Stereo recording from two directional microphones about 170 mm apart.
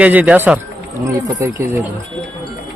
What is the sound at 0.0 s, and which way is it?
Speech, 10° right (ahead or behind).